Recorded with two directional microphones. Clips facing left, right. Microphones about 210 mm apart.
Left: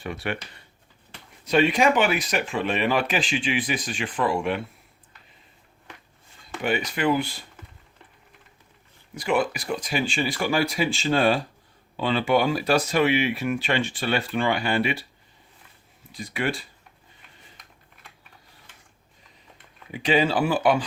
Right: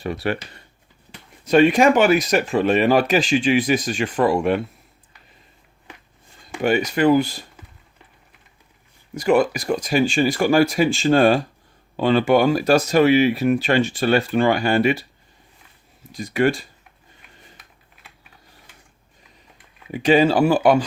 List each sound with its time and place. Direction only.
0.0 s speech: 35° right (ahead or behind)
1.5 s speech: 45° right (ahead or behind)
6.6 s speech: 45° right (ahead or behind)
9.1 s speech: 45° right (ahead or behind)
16.1 s speech: 45° right (ahead or behind)
17.6 s typing: 5° right (ahead or behind)
19.9 s speech: 45° right (ahead or behind)